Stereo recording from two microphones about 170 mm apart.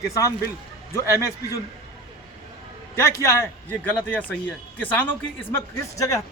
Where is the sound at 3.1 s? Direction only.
15° left (ahead or behind).